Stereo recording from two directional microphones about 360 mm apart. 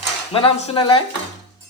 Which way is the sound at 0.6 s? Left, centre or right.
Centre.